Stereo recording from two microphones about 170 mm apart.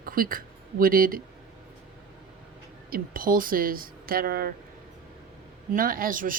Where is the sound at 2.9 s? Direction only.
60° right (ahead or behind).